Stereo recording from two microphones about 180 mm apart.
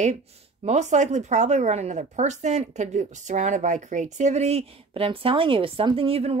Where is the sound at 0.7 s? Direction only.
40° right (ahead or behind).